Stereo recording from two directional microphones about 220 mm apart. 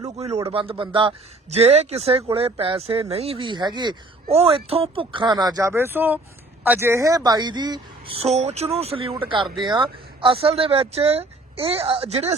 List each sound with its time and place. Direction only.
0.0 s a man's voice: 30° right (ahead or behind)